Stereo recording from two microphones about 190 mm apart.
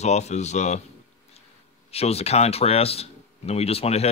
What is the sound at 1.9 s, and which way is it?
Speech, 35° left (ahead or behind).